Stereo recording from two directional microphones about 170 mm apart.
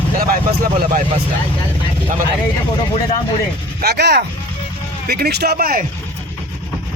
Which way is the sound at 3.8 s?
75° right (ahead or behind).